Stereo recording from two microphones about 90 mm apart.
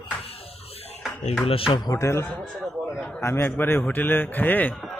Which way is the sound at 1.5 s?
90° left.